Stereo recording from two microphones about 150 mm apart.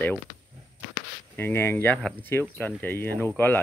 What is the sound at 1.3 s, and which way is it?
Speech, 15° left (ahead or behind).